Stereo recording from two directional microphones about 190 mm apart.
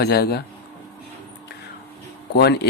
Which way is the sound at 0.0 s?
55° left (ahead or behind).